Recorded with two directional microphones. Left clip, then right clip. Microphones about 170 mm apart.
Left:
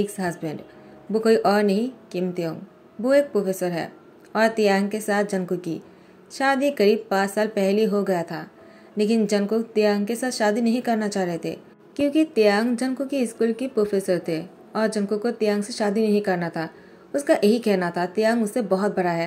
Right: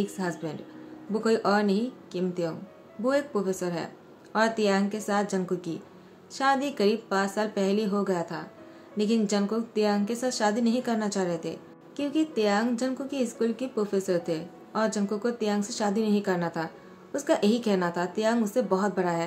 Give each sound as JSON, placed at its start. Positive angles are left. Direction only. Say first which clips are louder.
{"t": 0.0, "sound": "a woman's voice", "louder": "left 5 dB", "side_deg": 15}